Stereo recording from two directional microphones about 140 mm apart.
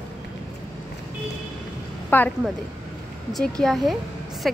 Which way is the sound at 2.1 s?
15° left (ahead or behind).